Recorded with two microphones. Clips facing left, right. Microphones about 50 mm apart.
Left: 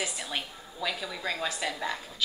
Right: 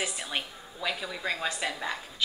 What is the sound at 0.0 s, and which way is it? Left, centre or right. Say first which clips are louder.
Speech: right 1 dB; centre.